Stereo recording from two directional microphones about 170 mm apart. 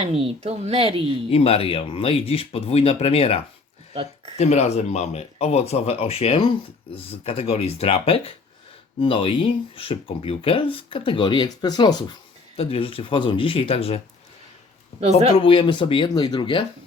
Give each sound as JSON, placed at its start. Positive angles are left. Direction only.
{"t": 0.0, "sound": "speech", "side_deg": -35}
{"t": 1.3, "sound": "speech", "side_deg": 35}
{"t": 15.4, "sound": "speech", "side_deg": 30}